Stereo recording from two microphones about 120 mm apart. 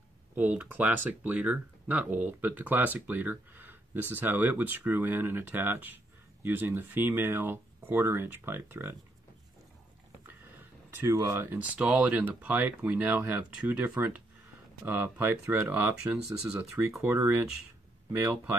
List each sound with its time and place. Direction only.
0.4 s speech: 15° right (ahead or behind)
10.9 s a sound: 20° right (ahead or behind)
11.1 s speech: 20° right (ahead or behind)